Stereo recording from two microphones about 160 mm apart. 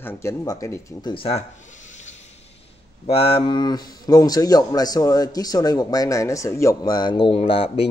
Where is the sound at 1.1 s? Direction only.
35° left (ahead or behind).